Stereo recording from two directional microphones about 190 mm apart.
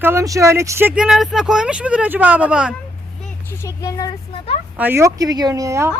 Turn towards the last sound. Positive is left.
turn(degrees=-15)  # may be behind; listen again after turning